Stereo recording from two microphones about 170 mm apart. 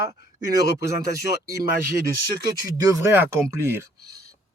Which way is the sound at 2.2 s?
60° left (ahead or behind).